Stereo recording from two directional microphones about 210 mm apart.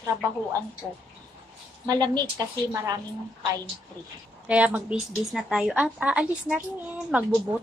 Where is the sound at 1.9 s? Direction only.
20° right (ahead or behind).